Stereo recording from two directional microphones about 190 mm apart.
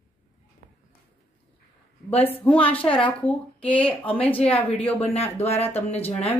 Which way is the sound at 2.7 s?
10° left (ahead or behind).